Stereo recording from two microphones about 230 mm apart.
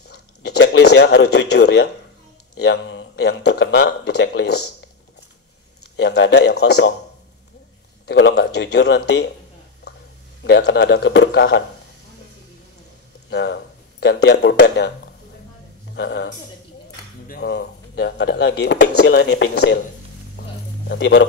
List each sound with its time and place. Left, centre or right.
0.1 s a sound: left
2.6 s speech: left
5.9 s speech: left
8.1 s speech: left
10.6 s speech: left
13.3 s speech: left
16.0 s speech: left
20.9 s speech: left